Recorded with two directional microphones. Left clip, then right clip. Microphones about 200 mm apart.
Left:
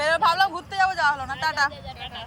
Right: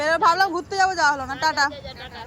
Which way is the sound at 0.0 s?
20° right (ahead or behind).